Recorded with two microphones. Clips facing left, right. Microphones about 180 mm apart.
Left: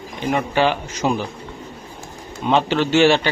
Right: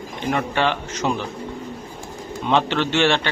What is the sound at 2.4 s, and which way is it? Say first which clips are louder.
Speech: left 2 dB; 10° left (ahead or behind).